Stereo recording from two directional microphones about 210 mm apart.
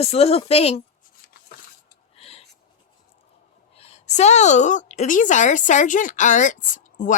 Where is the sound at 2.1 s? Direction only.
30° left (ahead or behind).